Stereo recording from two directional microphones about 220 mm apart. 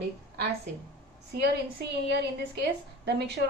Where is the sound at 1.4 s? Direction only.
50° right (ahead or behind).